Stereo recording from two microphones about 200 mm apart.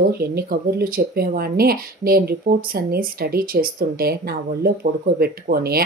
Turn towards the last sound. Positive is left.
turn(degrees=-50)  # may be behind; listen again after turning